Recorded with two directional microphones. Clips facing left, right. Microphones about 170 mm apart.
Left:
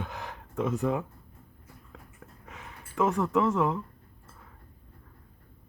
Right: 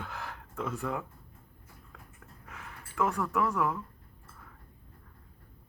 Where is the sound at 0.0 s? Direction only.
20° left (ahead or behind).